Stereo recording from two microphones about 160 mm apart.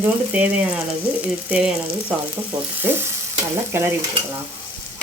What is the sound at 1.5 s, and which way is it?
A woman's voice, 10° right (ahead or behind).